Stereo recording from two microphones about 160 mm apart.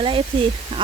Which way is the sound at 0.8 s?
30° right (ahead or behind).